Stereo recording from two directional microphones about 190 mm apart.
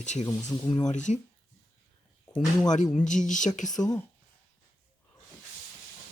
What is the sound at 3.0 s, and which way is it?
Speech, 40° left (ahead or behind).